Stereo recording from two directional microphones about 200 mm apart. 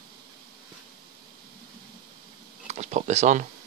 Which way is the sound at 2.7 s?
35° right (ahead or behind).